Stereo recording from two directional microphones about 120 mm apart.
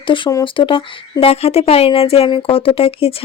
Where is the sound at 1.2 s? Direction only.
55° left (ahead or behind).